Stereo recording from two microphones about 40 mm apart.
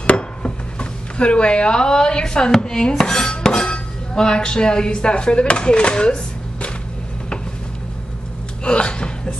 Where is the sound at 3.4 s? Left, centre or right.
Left.